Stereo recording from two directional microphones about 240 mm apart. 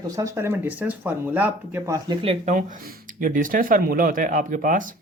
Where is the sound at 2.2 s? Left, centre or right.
Right.